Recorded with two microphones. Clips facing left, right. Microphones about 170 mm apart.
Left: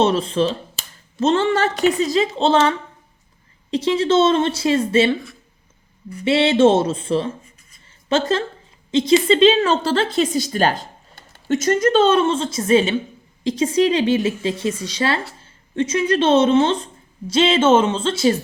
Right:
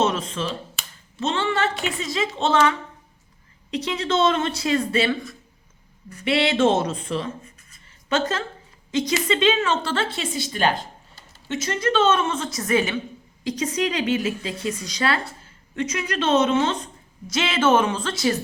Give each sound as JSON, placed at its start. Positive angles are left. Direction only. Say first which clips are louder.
{"t": 0.0, "sound": "a woman's voice", "louder": "left 6 dB", "side_deg": 30}
{"t": 6.2, "sound": "a woman's voice", "louder": "left 5 dB", "side_deg": 25}